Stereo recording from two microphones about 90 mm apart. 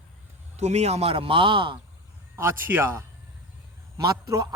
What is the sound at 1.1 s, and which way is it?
Speech, 90° right.